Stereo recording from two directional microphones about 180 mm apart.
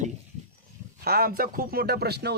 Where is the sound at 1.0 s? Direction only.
60° right (ahead or behind).